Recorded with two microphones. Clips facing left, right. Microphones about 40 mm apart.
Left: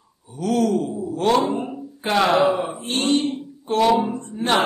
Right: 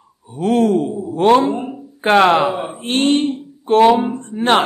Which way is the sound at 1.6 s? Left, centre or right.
Centre.